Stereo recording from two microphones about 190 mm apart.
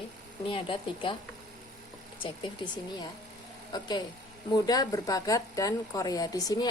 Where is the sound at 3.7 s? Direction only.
20° left (ahead or behind).